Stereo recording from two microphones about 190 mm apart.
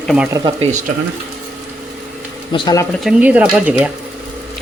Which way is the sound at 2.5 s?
20° left (ahead or behind).